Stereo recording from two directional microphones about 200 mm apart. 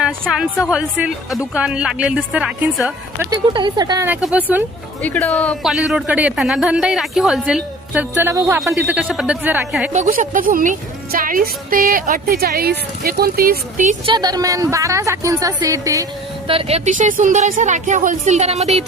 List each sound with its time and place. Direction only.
0.0 s a woman's voice: 5° right (ahead or behind)
3.2 s a woman's voice: 20° right (ahead or behind)
5.0 s speech: 5° left (ahead or behind); by 8.6 s 15° right (ahead or behind)
8.6 s speech: 5° right (ahead or behind)
9.9 s a woman's voice: 40° right (ahead or behind)
14.0 s a woman's voice: 20° right (ahead or behind)
16.5 s speech: 30° right (ahead or behind)